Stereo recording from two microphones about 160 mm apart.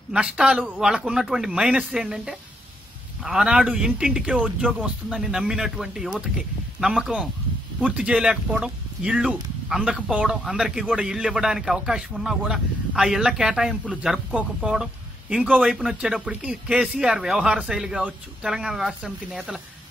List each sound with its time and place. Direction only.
0.1 s speech: 5° right (ahead or behind)